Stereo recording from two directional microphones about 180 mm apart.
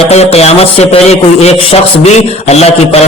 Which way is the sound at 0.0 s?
35° left (ahead or behind).